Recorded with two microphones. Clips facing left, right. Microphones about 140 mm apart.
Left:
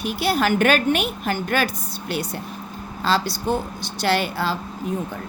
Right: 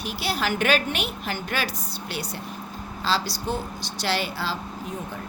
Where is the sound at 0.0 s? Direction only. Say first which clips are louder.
Left 6 dB; 55° left (ahead or behind).